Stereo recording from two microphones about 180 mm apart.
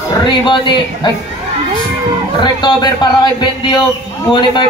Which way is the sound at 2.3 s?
25° left (ahead or behind).